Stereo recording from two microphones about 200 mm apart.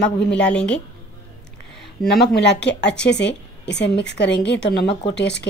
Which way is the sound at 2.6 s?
60° left (ahead or behind).